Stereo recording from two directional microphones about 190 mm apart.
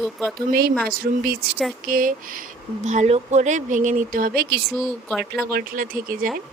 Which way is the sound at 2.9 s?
35° right (ahead or behind).